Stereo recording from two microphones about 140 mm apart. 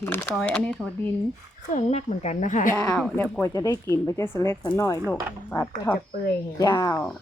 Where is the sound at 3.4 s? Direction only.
25° left (ahead or behind).